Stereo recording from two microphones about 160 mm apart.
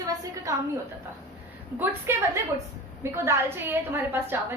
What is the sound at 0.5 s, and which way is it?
Speech, 20° right (ahead or behind).